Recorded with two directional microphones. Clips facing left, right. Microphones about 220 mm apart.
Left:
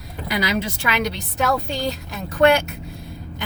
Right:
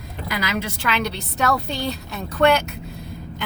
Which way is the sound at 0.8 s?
15° left (ahead or behind).